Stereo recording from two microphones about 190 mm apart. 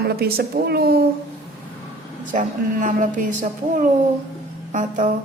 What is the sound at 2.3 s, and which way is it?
Speech, 40° right (ahead or behind).